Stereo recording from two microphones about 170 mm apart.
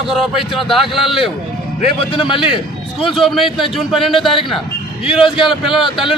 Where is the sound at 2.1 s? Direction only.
30° left (ahead or behind).